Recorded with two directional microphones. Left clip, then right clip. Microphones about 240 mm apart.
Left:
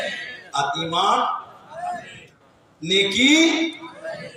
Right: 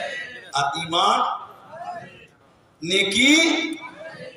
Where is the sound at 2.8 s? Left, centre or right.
Right.